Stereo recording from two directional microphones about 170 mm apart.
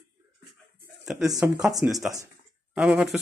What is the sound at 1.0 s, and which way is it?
Speech, centre (ahead or behind).